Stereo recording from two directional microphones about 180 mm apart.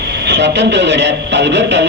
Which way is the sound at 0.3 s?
75° right (ahead or behind).